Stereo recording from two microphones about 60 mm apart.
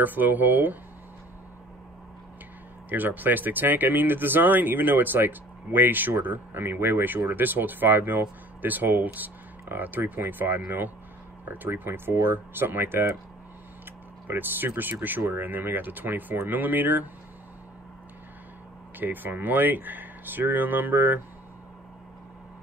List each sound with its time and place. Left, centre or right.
0.0 s speech: right
2.9 s speech: right
14.2 s speech: right
18.9 s speech: right